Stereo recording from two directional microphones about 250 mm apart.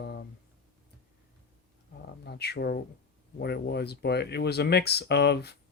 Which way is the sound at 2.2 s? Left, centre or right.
Left.